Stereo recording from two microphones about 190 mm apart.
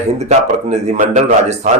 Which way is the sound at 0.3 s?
35° right (ahead or behind).